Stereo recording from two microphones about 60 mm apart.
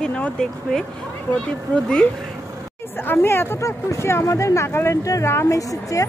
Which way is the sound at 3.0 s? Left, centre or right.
Left.